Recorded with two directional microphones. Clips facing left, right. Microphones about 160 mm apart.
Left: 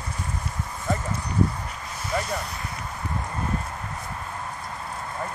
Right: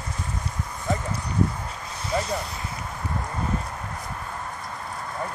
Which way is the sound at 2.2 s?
Centre (ahead or behind).